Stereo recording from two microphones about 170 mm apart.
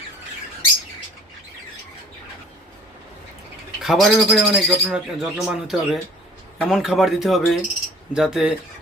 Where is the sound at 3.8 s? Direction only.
Centre (ahead or behind).